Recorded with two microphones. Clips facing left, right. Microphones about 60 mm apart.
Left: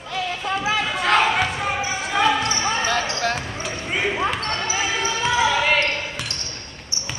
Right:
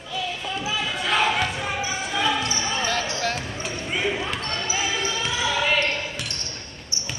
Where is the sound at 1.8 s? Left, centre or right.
Left.